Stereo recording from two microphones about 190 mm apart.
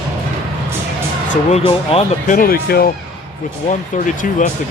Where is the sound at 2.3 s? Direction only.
50° left (ahead or behind).